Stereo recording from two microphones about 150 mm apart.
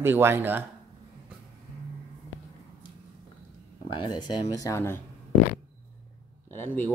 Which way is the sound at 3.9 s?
30° left (ahead or behind).